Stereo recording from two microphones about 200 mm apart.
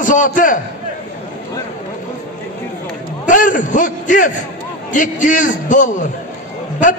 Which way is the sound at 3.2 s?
40° left (ahead or behind).